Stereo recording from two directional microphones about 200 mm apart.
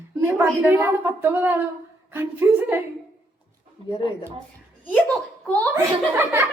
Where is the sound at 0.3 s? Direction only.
10° right (ahead or behind).